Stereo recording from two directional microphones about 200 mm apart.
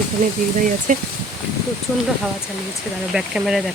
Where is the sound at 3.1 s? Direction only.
5° right (ahead or behind).